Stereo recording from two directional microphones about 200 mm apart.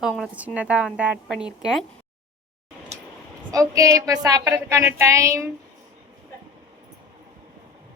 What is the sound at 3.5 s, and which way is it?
A woman's voice, 15° right (ahead or behind).